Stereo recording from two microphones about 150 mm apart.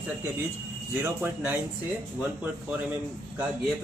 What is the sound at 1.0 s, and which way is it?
Speech, 10° right (ahead or behind).